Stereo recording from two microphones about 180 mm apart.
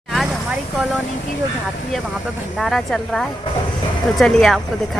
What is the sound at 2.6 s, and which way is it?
A woman's voice, centre (ahead or behind).